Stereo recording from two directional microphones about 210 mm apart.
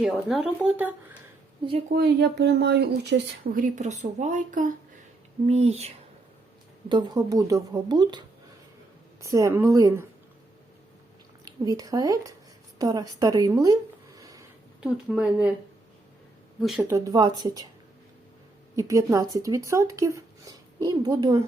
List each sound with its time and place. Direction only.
0.0 s a woman's voice: centre (ahead or behind)
1.9 s speech: 50° right (ahead or behind); by 5.9 s 30° right (ahead or behind)
6.8 s speech: 20° right (ahead or behind)
9.2 s speech: 15° right (ahead or behind)
11.4 s speech: 15° right (ahead or behind)
14.2 s sniff: 15° right (ahead or behind)
14.8 s a woman's voice: 5° right (ahead or behind)
16.6 s speech: centre (ahead or behind)
16.9 s speech: 15° right (ahead or behind)
18.8 s speech: 15° right (ahead or behind)